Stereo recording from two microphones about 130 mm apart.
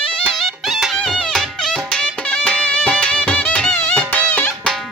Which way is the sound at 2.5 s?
10° left (ahead or behind).